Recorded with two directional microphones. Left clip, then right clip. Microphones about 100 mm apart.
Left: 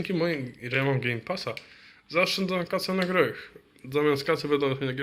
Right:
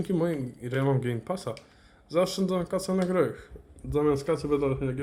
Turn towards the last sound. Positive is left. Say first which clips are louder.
# left 1 dB
turn(degrees=-10)  # may be behind; listen again after turning